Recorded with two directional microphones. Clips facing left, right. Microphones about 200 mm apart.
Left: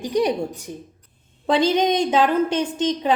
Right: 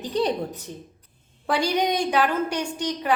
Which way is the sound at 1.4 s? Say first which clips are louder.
Left 5 dB; 20° left (ahead or behind).